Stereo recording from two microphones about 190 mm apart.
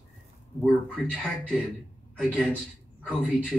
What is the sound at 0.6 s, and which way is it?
Speech, centre (ahead or behind).